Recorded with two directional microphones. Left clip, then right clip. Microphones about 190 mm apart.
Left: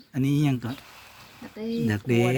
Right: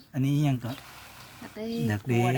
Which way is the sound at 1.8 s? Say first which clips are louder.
Left 4 dB; 5° left (ahead or behind).